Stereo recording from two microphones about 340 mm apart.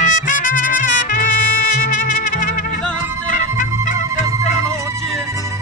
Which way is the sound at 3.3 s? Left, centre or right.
Left.